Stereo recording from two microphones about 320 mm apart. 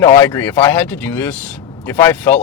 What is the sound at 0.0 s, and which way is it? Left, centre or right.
Speech, centre.